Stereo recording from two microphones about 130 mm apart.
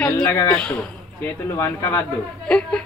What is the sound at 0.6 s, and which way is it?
Speech, 5° left (ahead or behind).